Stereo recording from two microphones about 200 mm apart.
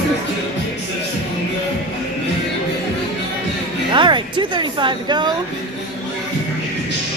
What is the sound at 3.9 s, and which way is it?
Speech, 25° right (ahead or behind).